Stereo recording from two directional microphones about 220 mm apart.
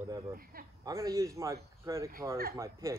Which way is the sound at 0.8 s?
15° right (ahead or behind).